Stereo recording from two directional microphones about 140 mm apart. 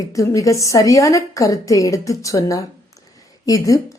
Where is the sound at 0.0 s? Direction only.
25° left (ahead or behind).